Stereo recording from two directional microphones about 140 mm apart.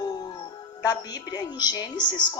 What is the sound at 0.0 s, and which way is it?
Music, 30° left (ahead or behind).